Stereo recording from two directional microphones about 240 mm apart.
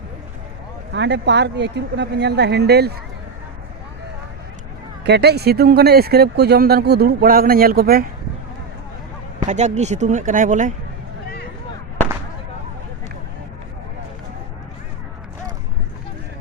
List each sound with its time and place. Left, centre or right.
0.9 s speech: right
5.0 s speech: right
9.5 s speech: right